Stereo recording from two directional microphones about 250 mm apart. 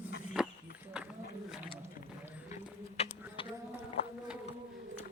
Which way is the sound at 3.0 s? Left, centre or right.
Left.